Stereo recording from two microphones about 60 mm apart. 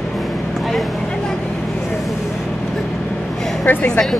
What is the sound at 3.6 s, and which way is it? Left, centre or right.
Speech, left.